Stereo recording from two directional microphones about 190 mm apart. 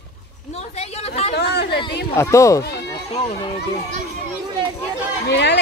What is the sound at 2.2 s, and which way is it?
Speech, 15° left (ahead or behind).